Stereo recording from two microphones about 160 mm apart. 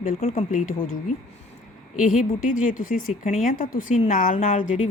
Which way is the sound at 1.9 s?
55° left (ahead or behind).